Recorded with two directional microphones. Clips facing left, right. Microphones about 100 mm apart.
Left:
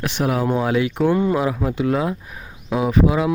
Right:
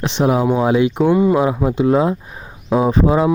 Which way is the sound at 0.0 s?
25° right (ahead or behind).